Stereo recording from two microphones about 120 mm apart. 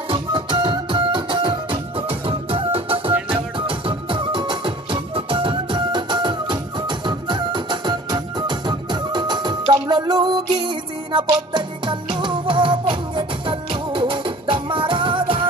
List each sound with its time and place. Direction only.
0.1 s music: 45° right (ahead or behind)